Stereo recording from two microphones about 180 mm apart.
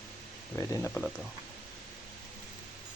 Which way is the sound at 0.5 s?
15° left (ahead or behind).